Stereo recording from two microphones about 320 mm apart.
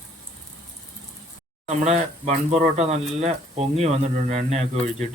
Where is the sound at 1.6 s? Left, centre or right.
Right.